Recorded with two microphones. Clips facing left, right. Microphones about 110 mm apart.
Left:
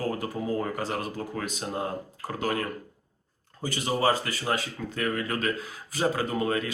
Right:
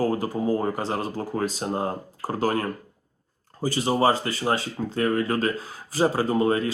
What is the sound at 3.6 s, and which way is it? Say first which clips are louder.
Speech: right 5 dB; 30° right (ahead or behind).